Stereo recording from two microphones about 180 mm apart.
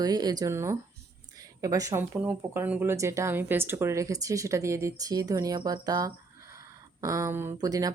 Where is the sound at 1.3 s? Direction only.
20° right (ahead or behind).